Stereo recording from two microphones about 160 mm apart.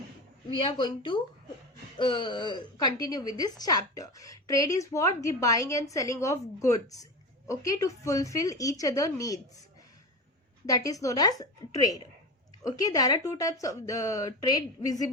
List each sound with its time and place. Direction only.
0.6 s a woman's voice: 30° left (ahead or behind)
10.7 s a woman's voice: 20° left (ahead or behind)